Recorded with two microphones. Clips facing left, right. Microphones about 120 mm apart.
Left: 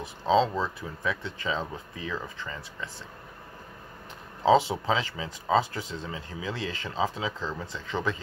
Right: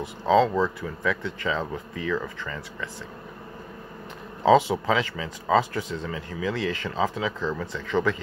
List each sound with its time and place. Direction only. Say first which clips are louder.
0.3 s speech: right 4 dB; 20° left (ahead or behind)
4.8 s speech: right 3 dB; 20° left (ahead or behind)